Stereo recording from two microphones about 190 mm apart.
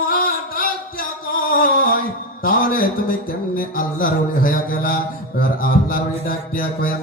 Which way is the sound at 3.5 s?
50° left (ahead or behind).